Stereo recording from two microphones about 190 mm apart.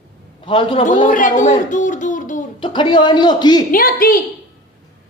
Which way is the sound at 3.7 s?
50° left (ahead or behind).